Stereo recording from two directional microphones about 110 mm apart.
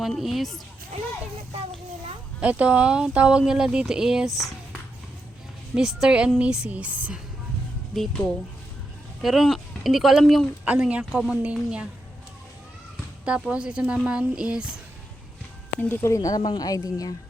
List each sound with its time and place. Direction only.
0.0 s speech: centre (ahead or behind)
2.4 s speech: 10° right (ahead or behind)
5.7 s speech: 5° right (ahead or behind)
7.9 s speech: centre (ahead or behind)
9.2 s speech: centre (ahead or behind)
10.7 s speech: 10° right (ahead or behind)
13.2 s speech: 10° right (ahead or behind)
15.8 s speech: 20° left (ahead or behind); by 17.2 s 35° left (ahead or behind)